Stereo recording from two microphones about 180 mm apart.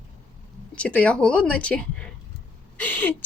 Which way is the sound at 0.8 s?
5° left (ahead or behind).